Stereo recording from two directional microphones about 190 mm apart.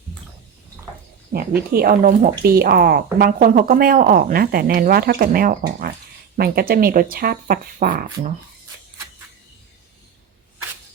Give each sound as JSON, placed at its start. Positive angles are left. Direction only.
{"t": 1.3, "sound": "a woman's voice", "side_deg": -50}